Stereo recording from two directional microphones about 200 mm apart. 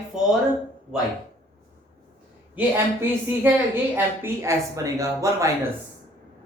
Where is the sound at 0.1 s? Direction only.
5° right (ahead or behind).